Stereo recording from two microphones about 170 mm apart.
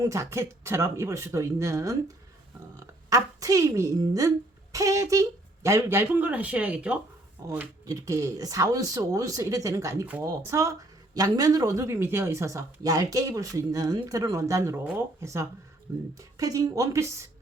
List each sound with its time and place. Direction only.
0.0 s speech: 20° right (ahead or behind)
3.1 s speech: 20° right (ahead or behind)